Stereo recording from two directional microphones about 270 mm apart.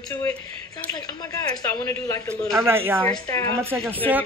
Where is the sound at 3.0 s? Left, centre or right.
Centre.